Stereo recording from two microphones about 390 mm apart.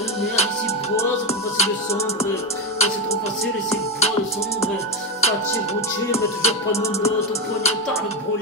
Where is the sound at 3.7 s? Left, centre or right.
Centre.